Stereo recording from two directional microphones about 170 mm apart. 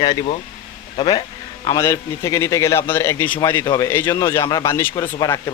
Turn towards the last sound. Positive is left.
turn(degrees=20)  # may be behind; listen again after turning